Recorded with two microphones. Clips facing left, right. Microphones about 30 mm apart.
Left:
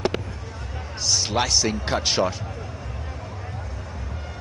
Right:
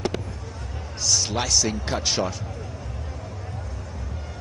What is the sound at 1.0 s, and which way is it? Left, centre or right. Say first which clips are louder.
A man's voice: left 1 dB; centre.